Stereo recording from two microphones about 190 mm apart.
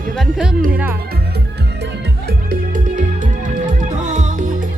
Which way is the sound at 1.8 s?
55° right (ahead or behind).